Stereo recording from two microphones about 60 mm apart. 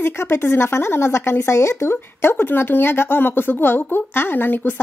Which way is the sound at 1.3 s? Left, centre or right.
Left.